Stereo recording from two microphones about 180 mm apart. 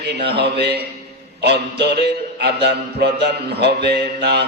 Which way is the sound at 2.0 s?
70° right (ahead or behind).